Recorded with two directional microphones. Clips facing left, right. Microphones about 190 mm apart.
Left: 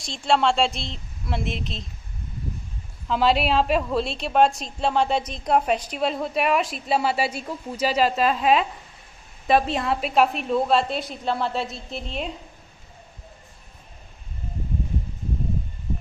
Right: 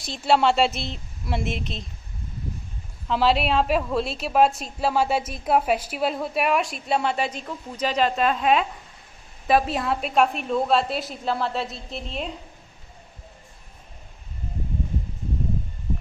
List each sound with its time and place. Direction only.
0.0 s a woman's voice: 5° right (ahead or behind)
3.1 s a woman's voice: centre (ahead or behind)